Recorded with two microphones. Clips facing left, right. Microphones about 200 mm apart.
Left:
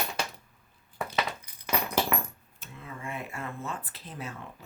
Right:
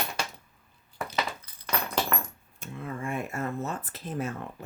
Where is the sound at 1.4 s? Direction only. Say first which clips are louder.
Left 1 dB; 15° left (ahead or behind).